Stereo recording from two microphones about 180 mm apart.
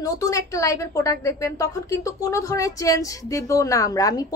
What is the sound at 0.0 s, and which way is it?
A woman's voice, 20° left (ahead or behind).